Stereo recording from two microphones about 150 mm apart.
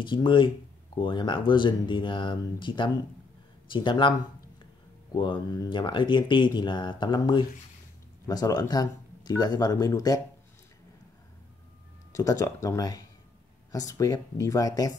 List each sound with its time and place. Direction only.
0.0 s speech: 35° left (ahead or behind)
5.1 s speech: 30° left (ahead or behind)
12.1 s speech: 25° left (ahead or behind)